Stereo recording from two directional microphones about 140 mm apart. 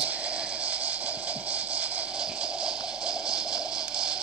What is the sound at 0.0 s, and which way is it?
Music, 10° right (ahead or behind).